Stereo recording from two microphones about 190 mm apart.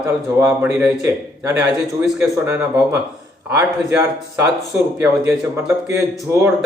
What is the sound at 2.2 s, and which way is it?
Speech, 15° right (ahead or behind).